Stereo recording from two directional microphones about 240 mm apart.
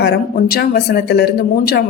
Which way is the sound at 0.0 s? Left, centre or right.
Left.